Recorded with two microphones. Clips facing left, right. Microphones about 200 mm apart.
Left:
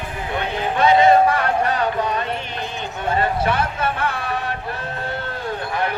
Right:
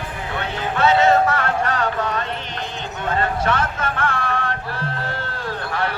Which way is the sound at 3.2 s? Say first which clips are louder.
Even; 10° left (ahead or behind).